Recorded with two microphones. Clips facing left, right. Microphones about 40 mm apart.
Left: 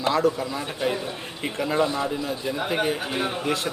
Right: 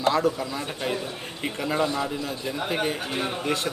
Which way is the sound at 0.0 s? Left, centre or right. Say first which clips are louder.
Left 1 dB; centre.